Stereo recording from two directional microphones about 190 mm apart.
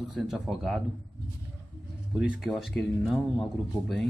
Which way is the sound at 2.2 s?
5° right (ahead or behind).